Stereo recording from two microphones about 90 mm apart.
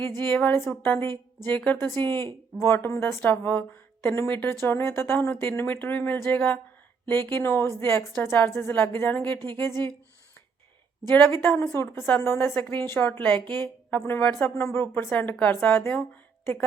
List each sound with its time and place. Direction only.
0.2 s a woman's voice: 20° left (ahead or behind)
4.3 s a woman's voice: 20° left (ahead or behind)
11.1 s a woman's voice: 25° left (ahead or behind)